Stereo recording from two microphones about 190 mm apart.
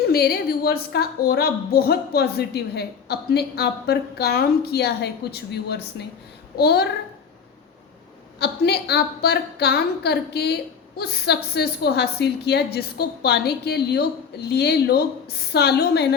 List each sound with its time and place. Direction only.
0.0 s a woman's voice: 55° left (ahead or behind)
8.4 s a woman's voice: 60° left (ahead or behind)